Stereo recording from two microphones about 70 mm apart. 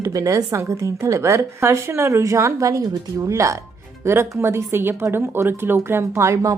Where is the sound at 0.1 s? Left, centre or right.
Right.